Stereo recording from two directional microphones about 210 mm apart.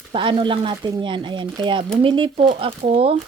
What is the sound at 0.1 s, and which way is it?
Speech, 25° right (ahead or behind).